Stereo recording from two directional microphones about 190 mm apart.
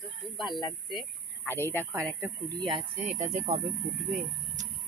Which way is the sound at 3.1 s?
40° right (ahead or behind).